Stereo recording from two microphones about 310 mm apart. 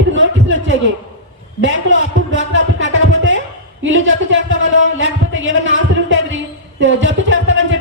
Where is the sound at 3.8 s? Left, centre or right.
Right.